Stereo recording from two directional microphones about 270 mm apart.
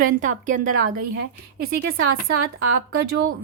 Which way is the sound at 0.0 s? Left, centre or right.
Right.